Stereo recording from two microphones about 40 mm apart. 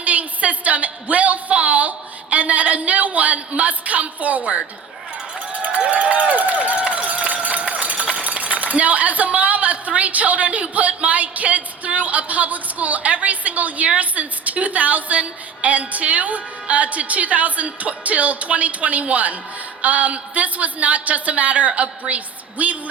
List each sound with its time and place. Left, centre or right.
0.0 s a sound: right
5.6 s run: right
14.0 s a woman's voice: right